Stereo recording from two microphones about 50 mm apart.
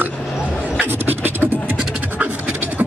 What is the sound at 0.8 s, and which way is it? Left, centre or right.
Beatboxing, right.